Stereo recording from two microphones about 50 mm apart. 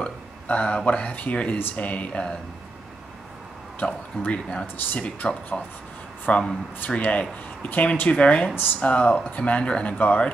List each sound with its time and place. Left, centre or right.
0.0 s speech: left
3.8 s speech: left